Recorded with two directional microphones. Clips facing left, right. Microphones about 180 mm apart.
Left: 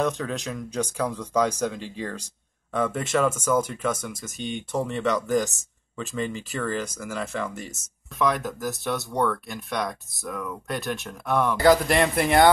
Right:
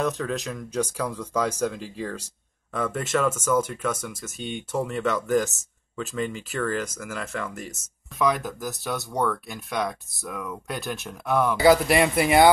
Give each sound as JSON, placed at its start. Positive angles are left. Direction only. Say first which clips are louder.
{"t": 0.0, "sound": "speech", "louder": "even", "side_deg": 0}